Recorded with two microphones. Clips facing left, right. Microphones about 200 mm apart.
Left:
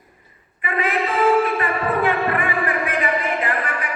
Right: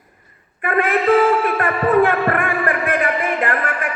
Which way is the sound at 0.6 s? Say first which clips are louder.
Right 5 dB; 50° right (ahead or behind).